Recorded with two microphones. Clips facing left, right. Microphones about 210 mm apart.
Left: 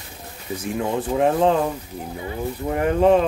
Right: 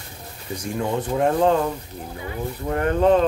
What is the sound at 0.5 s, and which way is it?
Speech, 5° left (ahead or behind).